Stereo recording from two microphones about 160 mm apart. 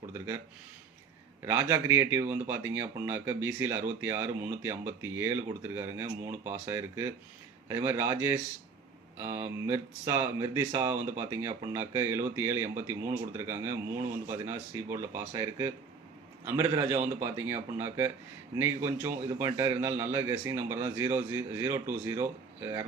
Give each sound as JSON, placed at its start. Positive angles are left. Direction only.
{"t": 1.5, "sound": "speech", "side_deg": -15}